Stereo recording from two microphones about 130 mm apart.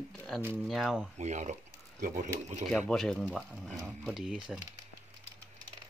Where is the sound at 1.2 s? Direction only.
65° right (ahead or behind).